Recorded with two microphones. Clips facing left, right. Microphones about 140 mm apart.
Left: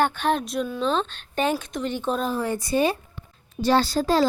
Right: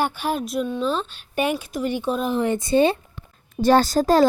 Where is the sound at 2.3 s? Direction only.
20° right (ahead or behind).